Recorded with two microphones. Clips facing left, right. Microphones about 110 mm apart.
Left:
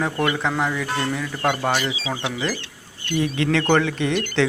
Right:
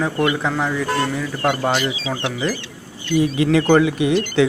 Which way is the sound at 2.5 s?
90° left.